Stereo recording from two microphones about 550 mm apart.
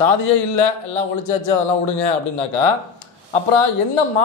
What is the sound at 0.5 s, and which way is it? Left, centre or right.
Speech, left.